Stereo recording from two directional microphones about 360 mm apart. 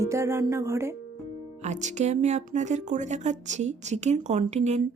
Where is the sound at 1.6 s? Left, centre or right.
Centre.